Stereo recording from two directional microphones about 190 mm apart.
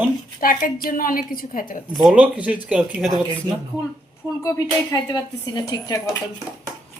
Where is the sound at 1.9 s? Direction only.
5° right (ahead or behind).